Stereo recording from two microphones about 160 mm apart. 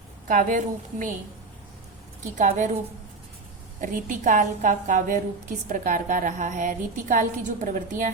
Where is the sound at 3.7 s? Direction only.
55° right (ahead or behind).